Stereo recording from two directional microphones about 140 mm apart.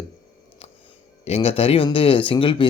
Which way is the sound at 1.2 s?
45° left (ahead or behind).